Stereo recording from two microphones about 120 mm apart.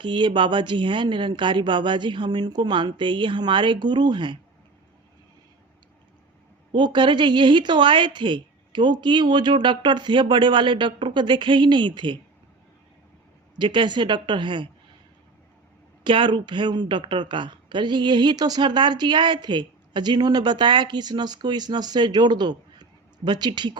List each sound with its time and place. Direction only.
0.0 s speech: 40° right (ahead or behind)
6.7 s speech: 40° right (ahead or behind)
13.6 s speech: 40° right (ahead or behind)
16.0 s speech: 45° right (ahead or behind)